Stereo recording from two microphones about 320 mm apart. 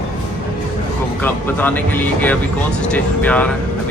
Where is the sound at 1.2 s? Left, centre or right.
Centre.